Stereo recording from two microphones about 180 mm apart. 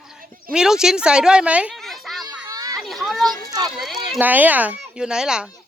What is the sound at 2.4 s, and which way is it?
Children playing, 20° right (ahead or behind).